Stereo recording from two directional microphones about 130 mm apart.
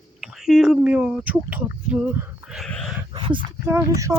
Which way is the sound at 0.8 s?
10° right (ahead or behind).